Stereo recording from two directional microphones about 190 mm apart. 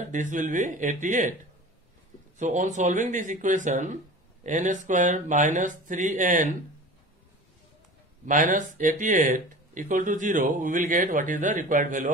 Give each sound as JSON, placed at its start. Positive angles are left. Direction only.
{"t": 0.1, "sound": "speech", "side_deg": -40}
{"t": 2.3, "sound": "speech", "side_deg": -40}
{"t": 8.3, "sound": "speech", "side_deg": -45}